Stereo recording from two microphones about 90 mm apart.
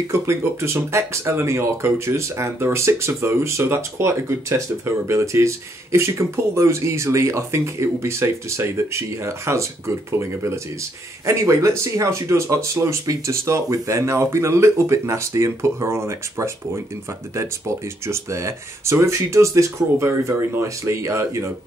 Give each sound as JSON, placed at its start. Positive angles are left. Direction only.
{"t": 0.1, "sound": "speech", "side_deg": -30}